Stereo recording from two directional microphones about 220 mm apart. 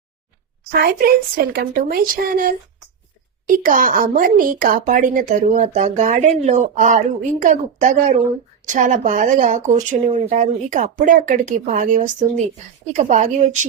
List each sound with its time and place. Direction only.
0.7 s a woman's voice: 45° right (ahead or behind)